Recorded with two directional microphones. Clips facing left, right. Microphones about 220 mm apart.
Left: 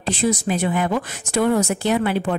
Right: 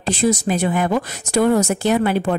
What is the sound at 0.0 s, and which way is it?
Speech, 45° right (ahead or behind).